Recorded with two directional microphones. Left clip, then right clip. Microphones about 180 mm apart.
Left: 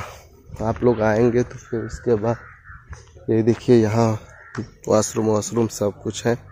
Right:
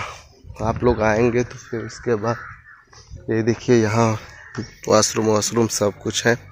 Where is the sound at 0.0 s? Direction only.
25° left (ahead or behind).